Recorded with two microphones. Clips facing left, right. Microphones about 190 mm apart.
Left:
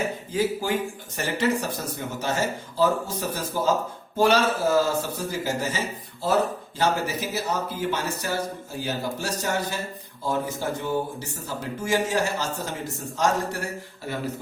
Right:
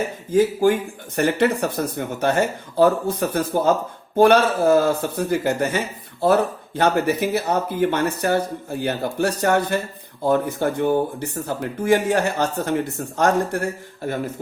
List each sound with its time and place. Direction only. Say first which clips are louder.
0.3 s speech: right 8 dB; 55° right (ahead or behind)